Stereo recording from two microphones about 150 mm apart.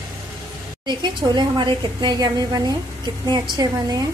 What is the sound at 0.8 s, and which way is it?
A woman's voice, 30° right (ahead or behind).